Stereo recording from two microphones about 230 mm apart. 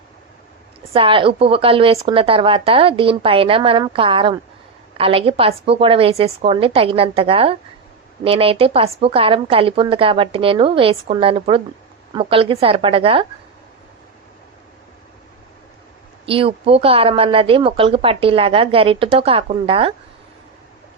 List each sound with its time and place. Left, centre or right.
0.9 s speech: right
16.2 s speech: right